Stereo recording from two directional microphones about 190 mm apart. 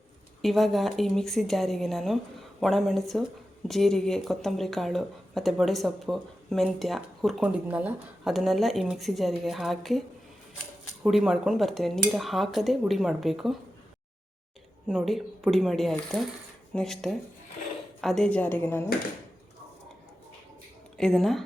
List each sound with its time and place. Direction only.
0.4 s speech: centre (ahead or behind)
11.0 s speech: 5° right (ahead or behind)
14.8 s a woman's voice: centre (ahead or behind)
21.0 s speech: centre (ahead or behind)